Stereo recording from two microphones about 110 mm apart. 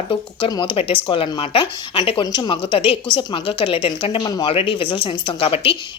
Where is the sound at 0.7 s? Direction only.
60° left (ahead or behind).